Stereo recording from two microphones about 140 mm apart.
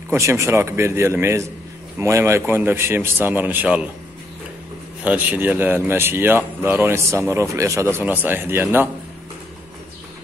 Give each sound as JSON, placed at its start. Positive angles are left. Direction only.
{"t": 0.1, "sound": "speech", "side_deg": -20}
{"t": 5.0, "sound": "speech", "side_deg": -10}